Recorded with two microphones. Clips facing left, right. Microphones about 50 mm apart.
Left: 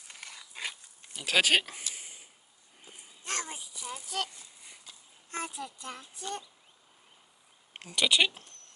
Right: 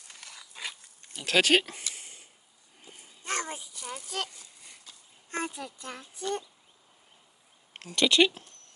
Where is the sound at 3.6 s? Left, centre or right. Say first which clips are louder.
Right 1 dB; centre.